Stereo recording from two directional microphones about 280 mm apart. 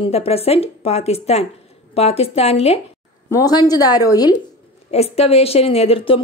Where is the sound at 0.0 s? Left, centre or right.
Left.